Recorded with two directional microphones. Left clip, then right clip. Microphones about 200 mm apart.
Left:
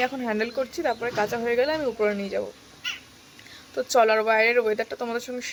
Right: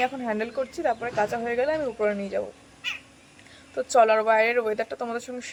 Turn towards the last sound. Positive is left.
turn(degrees=5)  # may be behind; listen again after turning